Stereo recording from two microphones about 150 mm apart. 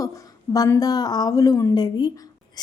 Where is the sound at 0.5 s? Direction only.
25° left (ahead or behind).